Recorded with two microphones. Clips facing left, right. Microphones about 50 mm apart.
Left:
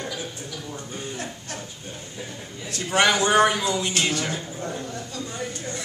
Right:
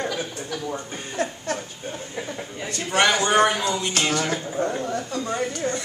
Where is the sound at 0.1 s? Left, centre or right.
Right.